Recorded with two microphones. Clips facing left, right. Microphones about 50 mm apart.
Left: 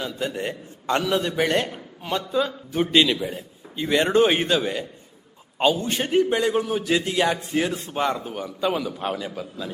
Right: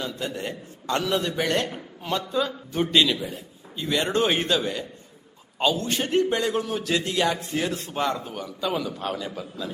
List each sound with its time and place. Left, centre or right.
0.0 s a man's voice: centre
0.3 s a man's voice: centre
1.7 s a man's voice: centre